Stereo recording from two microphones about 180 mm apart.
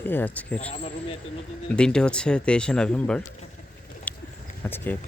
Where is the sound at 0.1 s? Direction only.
10° left (ahead or behind).